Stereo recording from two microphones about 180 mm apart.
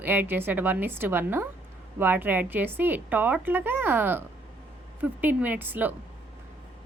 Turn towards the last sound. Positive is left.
turn(degrees=-10)  # may be behind; listen again after turning